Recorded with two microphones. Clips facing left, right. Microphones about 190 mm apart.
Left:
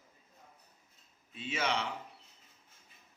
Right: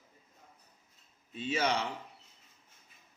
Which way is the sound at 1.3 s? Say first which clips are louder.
Right 4 dB; 40° right (ahead or behind).